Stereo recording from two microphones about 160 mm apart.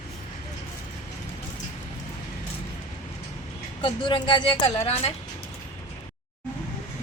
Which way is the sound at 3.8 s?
30° left (ahead or behind).